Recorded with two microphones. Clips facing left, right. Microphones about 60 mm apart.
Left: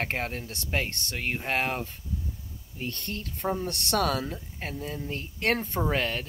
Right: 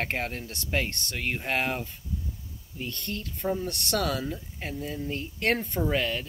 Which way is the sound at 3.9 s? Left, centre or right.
Left.